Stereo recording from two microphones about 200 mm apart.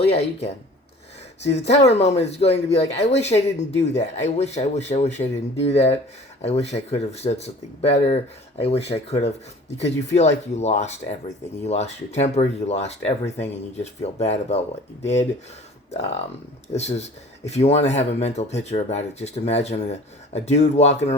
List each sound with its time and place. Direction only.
0.0 s speech: 30° left (ahead or behind)
1.4 s speech: 60° left (ahead or behind)
1.6 s speech: 30° left (ahead or behind)
15.9 s speech: 30° left (ahead or behind)